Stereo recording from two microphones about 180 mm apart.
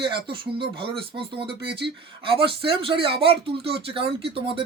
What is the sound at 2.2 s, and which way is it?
A man's voice, 30° right (ahead or behind).